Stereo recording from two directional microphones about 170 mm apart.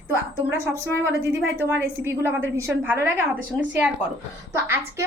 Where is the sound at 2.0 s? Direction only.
15° right (ahead or behind).